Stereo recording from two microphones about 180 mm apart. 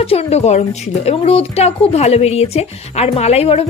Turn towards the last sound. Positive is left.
turn(degrees=35)  # may be behind; listen again after turning